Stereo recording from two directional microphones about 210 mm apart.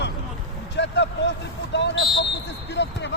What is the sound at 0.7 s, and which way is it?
Speech, 55° left (ahead or behind).